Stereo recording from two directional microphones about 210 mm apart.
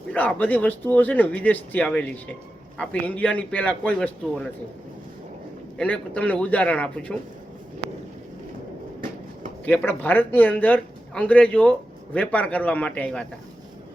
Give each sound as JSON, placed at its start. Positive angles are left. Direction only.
{"t": 0.1, "sound": "speech", "side_deg": 5}
{"t": 5.7, "sound": "speech", "side_deg": 5}
{"t": 9.6, "sound": "speech", "side_deg": 10}